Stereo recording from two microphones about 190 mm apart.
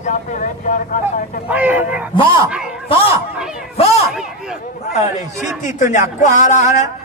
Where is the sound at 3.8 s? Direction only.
35° left (ahead or behind).